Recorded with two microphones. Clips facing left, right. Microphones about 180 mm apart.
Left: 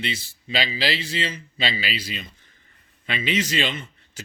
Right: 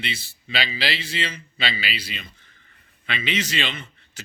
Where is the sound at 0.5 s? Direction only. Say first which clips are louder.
Left 2 dB; 40° left (ahead or behind).